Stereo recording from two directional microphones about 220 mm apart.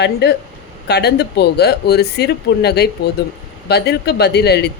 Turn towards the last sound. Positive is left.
turn(degrees=50)  # may be behind; listen again after turning